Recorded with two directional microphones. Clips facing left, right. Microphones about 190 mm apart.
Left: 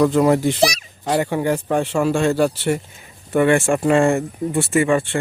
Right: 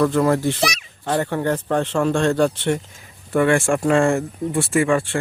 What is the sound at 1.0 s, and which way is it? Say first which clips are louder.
A man's voice: left 2 dB; 10° left (ahead or behind).